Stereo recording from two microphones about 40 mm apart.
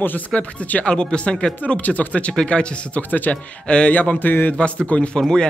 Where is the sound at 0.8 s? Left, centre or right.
Left.